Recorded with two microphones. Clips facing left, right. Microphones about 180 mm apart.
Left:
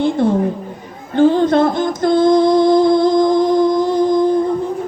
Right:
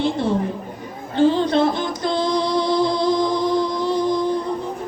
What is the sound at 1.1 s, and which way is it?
Music, 50° left (ahead or behind).